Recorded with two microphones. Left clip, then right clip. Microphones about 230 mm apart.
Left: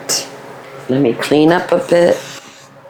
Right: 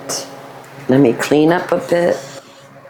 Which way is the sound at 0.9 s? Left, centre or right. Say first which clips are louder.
Right 2 dB; right.